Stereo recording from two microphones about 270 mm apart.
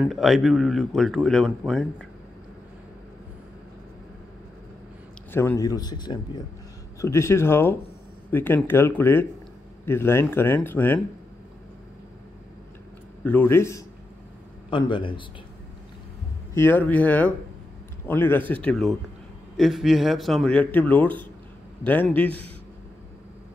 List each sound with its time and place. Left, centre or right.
0.0 s speech: centre
5.3 s a man's voice: centre
13.2 s a man's voice: centre
16.5 s a man's voice: centre